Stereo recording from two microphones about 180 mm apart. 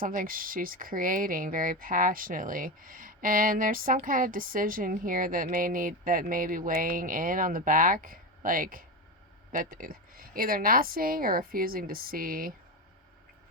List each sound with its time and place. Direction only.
0.0 s speech: 50° right (ahead or behind)